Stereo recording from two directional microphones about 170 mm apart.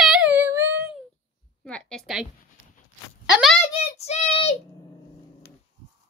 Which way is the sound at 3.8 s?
40° left (ahead or behind).